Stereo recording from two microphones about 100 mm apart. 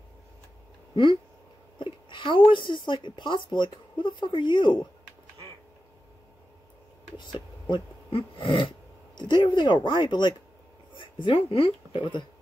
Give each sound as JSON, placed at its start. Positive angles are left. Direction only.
{"t": 1.8, "sound": "speech", "side_deg": 55}
{"t": 7.2, "sound": "speech", "side_deg": 50}
{"t": 9.1, "sound": "speech", "side_deg": 50}